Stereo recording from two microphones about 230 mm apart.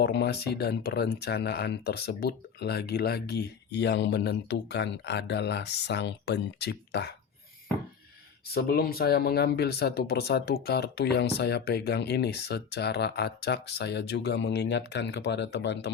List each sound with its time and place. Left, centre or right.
0.0 s speech: left
8.5 s speech: left